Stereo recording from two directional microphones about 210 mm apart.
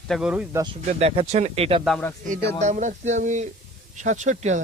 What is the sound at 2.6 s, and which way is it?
Speech, 35° right (ahead or behind).